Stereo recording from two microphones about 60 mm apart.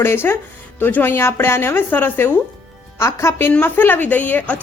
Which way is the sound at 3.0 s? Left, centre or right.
Left.